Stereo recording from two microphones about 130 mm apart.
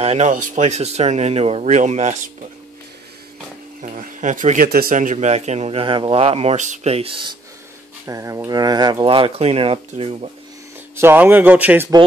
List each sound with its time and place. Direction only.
0.0 s speech: 60° right (ahead or behind)
3.8 s speech: 70° right (ahead or behind); by 7.2 s 45° right (ahead or behind)
8.1 s speech: 25° right (ahead or behind); by 10.3 s 50° right (ahead or behind)
11.0 s speech: 15° right (ahead or behind)